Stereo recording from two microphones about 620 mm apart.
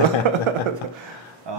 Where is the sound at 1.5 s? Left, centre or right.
Right.